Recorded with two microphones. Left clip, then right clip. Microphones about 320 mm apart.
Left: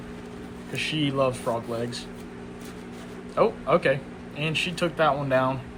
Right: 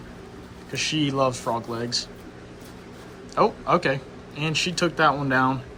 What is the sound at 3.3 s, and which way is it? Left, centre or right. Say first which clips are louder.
Speech: right 1 dB; centre.